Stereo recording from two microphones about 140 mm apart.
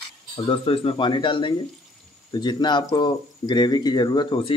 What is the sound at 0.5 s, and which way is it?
Speech, 40° left (ahead or behind).